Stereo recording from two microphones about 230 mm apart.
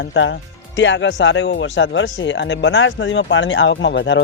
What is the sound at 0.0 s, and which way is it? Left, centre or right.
Speech, left.